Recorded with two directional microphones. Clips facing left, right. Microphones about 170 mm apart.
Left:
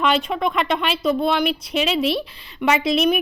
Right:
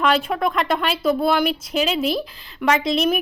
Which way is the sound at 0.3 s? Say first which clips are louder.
Even; centre (ahead or behind).